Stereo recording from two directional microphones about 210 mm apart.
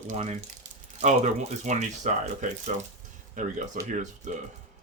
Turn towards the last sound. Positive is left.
turn(degrees=-35)  # may be behind; listen again after turning